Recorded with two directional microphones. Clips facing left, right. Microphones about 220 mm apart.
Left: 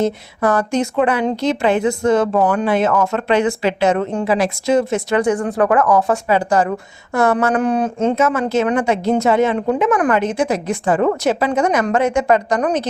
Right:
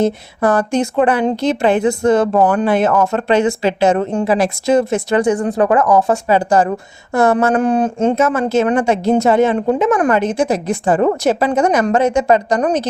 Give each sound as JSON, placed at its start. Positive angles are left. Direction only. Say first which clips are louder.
{"t": 0.4, "sound": "a woman's voice", "louder": "right 2 dB", "side_deg": -30}
{"t": 4.4, "sound": "speech", "louder": "right 2 dB", "side_deg": -50}
{"t": 4.9, "sound": "a woman's voice", "louder": "right 2 dB", "side_deg": -30}
{"t": 5.3, "sound": "a woman's voice", "louder": "right 1 dB", "side_deg": -20}
{"t": 9.0, "sound": "a woman's voice", "louder": "right 3 dB", "side_deg": -40}